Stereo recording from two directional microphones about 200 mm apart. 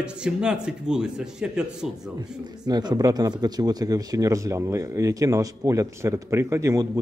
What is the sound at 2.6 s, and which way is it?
Speech, 20° right (ahead or behind).